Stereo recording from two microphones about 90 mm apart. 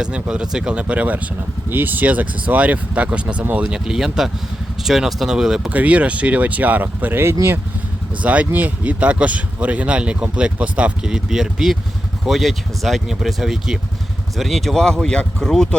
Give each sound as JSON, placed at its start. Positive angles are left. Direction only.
{"t": 0.0, "sound": "speech", "side_deg": -10}
{"t": 8.2, "sound": "speech", "side_deg": -15}